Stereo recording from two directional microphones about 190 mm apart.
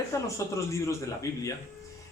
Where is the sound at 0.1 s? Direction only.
15° left (ahead or behind).